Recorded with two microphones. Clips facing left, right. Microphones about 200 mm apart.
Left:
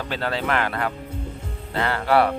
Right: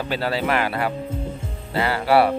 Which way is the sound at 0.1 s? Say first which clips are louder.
Right 2 dB; 10° right (ahead or behind).